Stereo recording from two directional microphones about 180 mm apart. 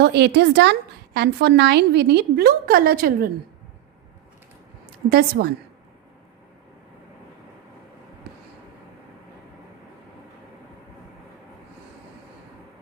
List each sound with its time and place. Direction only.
0.0 s a woman's voice: 70° right (ahead or behind)
5.0 s a woman's voice: 55° right (ahead or behind)